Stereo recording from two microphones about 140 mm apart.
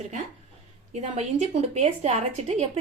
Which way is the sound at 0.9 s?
55° right (ahead or behind).